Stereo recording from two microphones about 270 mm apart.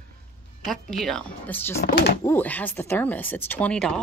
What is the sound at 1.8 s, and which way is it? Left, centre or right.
Speech, left.